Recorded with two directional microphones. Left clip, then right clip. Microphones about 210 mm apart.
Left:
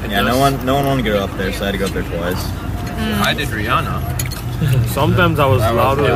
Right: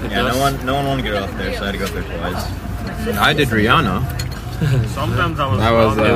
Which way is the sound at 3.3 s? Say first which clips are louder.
Right 6 dB; 55° right (ahead or behind).